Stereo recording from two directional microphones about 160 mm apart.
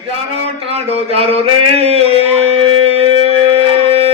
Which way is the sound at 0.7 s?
40° right (ahead or behind).